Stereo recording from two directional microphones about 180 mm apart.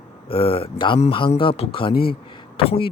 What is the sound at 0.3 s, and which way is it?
Speech, 30° left (ahead or behind).